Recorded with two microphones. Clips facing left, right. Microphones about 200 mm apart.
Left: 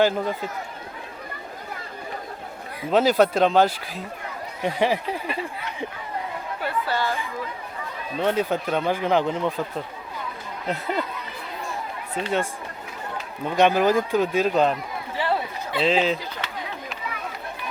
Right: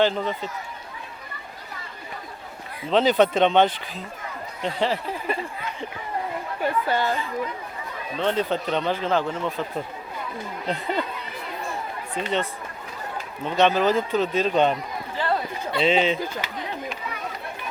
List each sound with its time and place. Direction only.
0.0 s a man's voice: 10° left (ahead or behind)
2.9 s a man's voice: 5° left (ahead or behind)
6.6 s speech: 15° right (ahead or behind)
8.2 s a man's voice: 10° left (ahead or behind)
10.7 s speech: 5° left (ahead or behind)
12.1 s a man's voice: 10° left (ahead or behind)
15.2 s chatter: 5° left (ahead or behind)